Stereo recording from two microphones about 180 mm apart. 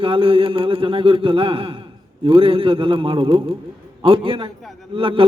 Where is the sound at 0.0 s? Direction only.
30° right (ahead or behind).